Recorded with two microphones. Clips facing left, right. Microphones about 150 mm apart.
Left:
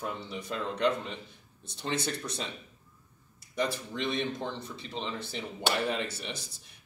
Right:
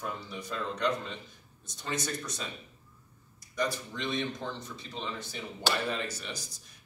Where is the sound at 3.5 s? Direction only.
25° left (ahead or behind).